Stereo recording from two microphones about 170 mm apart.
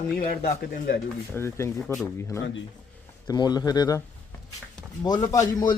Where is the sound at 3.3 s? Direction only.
25° left (ahead or behind).